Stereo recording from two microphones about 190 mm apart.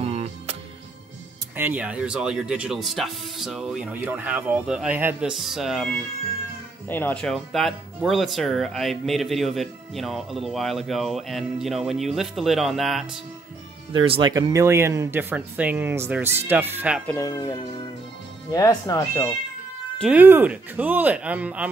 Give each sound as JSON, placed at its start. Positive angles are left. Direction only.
{"t": 0.0, "sound": "music", "side_deg": -35}
{"t": 1.6, "sound": "speech", "side_deg": -10}
{"t": 6.9, "sound": "speech", "side_deg": 10}
{"t": 13.9, "sound": "speech", "side_deg": -25}
{"t": 17.1, "sound": "speech", "side_deg": 15}
{"t": 20.0, "sound": "speech", "side_deg": -5}